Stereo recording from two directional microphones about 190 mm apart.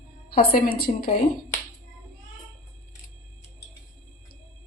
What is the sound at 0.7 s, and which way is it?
Speech, 50° left (ahead or behind).